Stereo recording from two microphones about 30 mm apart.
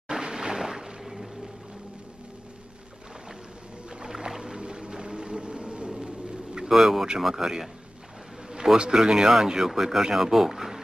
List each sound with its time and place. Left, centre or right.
0.1 s a sound: right
0.6 s music: centre
3.9 s whale vocalization: right
5.9 s a sound: right
6.7 s speech: centre
8.9 s speech: right